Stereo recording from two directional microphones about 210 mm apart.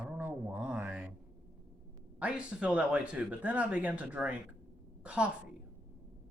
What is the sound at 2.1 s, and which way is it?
A man's voice, 5° right (ahead or behind).